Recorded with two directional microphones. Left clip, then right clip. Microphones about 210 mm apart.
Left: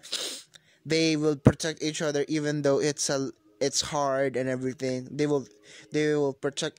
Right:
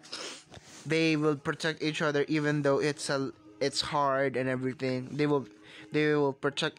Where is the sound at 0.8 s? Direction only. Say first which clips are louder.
Left 2 dB; 35° left (ahead or behind).